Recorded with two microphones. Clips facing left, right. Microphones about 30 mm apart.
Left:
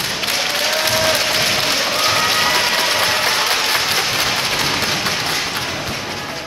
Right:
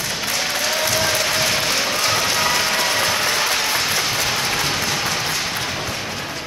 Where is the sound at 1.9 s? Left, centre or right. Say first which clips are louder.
Left 3 dB; left.